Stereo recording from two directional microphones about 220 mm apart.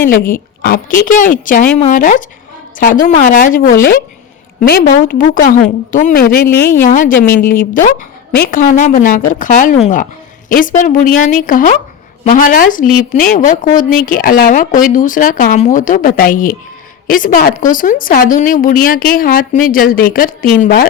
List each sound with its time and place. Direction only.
0.6 s a woman's voice: 40° left (ahead or behind)